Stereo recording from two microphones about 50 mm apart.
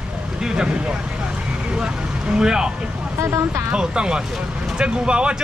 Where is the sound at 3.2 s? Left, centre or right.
Right.